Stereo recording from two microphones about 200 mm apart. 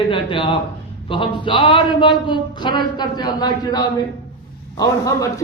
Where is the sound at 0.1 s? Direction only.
25° left (ahead or behind).